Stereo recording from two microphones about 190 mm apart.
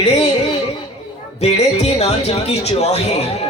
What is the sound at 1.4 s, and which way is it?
A woman's voice, 35° left (ahead or behind).